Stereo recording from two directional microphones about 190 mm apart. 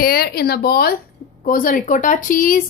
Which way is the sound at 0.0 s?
55° left (ahead or behind).